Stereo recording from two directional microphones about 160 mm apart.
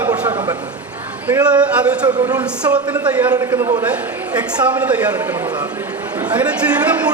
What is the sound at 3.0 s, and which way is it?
Speech, 25° right (ahead or behind).